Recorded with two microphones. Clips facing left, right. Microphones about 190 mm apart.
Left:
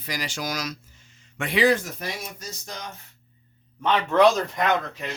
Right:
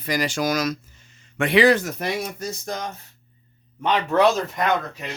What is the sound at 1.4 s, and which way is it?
Speech, 70° right (ahead or behind).